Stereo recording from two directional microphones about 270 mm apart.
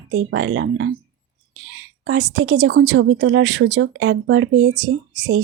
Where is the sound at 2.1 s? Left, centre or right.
Right.